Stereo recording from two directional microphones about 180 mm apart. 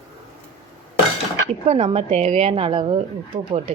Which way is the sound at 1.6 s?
35° right (ahead or behind).